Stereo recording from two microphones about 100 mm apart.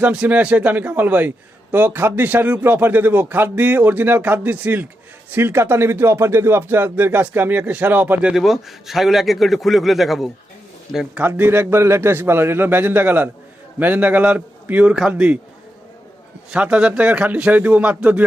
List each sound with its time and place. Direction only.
0.0 s speech: 15° right (ahead or behind)
8.3 s a man's voice: centre (ahead or behind)
11.2 s speech: 20° right (ahead or behind)
16.5 s speech: 10° right (ahead or behind)